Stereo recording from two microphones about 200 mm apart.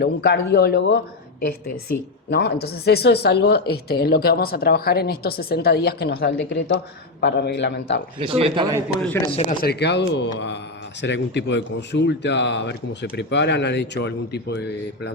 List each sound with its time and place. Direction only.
0.0 s speech: 55° left (ahead or behind)
2.3 s speech: 55° left (ahead or behind)
8.2 s a man's voice: 25° right (ahead or behind)
9.2 s speech: 25° left (ahead or behind)
9.5 s speech: 50° left (ahead or behind)